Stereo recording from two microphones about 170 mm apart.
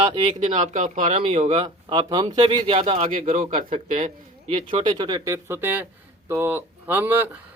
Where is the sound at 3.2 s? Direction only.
50° right (ahead or behind).